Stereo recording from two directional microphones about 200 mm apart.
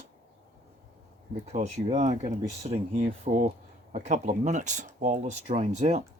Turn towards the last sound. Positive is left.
turn(degrees=-35)  # may be behind; listen again after turning